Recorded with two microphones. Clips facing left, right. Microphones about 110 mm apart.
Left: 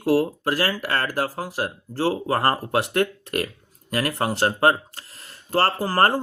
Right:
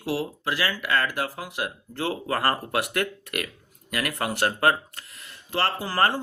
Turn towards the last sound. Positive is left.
turn(degrees=40)  # may be behind; listen again after turning